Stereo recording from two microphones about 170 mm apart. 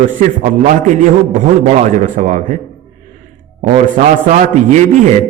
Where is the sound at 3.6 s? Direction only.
45° right (ahead or behind).